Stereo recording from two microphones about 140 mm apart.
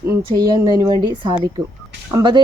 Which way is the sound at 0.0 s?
25° right (ahead or behind).